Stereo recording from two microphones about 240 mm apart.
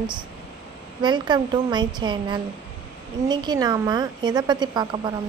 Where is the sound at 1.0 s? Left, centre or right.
Centre.